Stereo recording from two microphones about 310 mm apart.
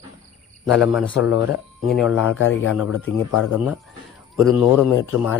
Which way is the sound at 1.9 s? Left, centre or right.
Centre.